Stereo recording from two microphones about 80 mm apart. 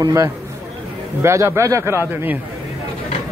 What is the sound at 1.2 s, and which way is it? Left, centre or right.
A man's voice, right.